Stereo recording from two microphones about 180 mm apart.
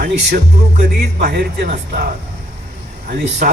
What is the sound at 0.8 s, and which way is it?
Speech, 65° right (ahead or behind).